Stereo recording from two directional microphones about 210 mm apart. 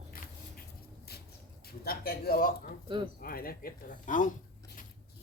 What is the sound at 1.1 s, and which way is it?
Vehicle, 50° left (ahead or behind).